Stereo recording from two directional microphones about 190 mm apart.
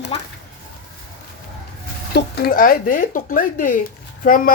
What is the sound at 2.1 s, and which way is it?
Speech, 50° left (ahead or behind).